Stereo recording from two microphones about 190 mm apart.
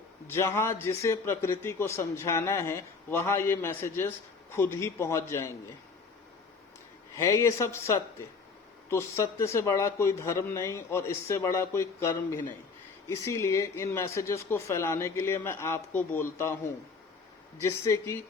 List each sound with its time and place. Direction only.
0.3 s a man's voice: 15° left (ahead or behind)
7.2 s a man's voice: 15° left (ahead or behind)
17.6 s a man's voice: 15° left (ahead or behind)